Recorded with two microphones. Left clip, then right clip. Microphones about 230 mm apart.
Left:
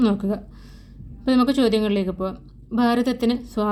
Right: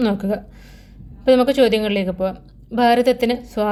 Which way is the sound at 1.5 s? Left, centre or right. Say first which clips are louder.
Right 4 dB; right.